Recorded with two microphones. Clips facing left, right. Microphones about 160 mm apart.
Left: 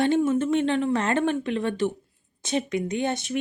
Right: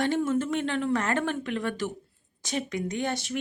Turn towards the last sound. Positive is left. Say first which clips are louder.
# left 3 dB
turn(degrees=20)  # may be behind; listen again after turning